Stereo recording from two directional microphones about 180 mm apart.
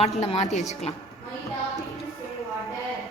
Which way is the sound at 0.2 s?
35° left (ahead or behind).